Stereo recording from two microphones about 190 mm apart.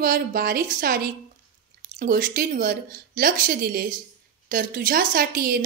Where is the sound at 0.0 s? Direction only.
50° right (ahead or behind).